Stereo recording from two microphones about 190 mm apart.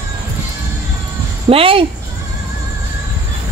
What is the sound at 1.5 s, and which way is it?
Speech, 30° right (ahead or behind).